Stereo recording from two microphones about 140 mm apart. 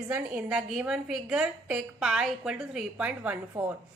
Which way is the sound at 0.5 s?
5° right (ahead or behind).